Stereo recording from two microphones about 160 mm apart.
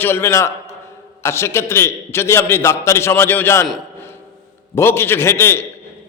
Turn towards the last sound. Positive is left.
turn(degrees=15)  # may be behind; listen again after turning